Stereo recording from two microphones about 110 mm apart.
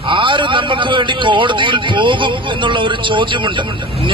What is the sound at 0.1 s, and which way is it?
A man's voice, 45° right (ahead or behind).